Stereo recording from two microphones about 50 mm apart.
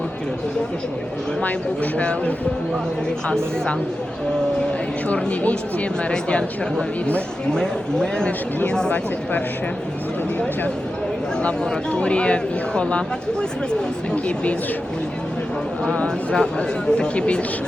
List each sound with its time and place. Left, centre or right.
1.4 s speech: left
4.4 s speech: centre
11.4 s speech: centre
14.1 s speech: left
15.8 s speech: centre